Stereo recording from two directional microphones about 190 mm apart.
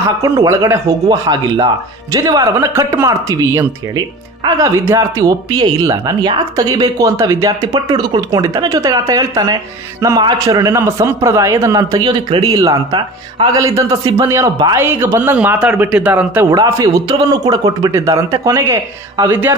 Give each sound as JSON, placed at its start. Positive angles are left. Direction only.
{"t": 0.2, "sound": "speech", "side_deg": -15}
{"t": 4.6, "sound": "speech", "side_deg": -15}